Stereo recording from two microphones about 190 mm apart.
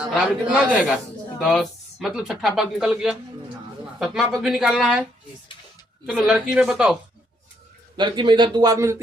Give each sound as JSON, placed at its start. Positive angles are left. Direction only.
{"t": 0.0, "sound": "speech", "side_deg": 0}
{"t": 6.1, "sound": "speech", "side_deg": -5}
{"t": 7.9, "sound": "speech", "side_deg": -25}